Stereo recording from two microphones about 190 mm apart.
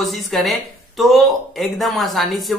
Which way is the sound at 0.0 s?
Centre (ahead or behind).